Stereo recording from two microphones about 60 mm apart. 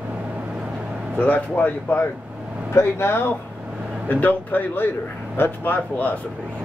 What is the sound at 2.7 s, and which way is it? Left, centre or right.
Speech, left.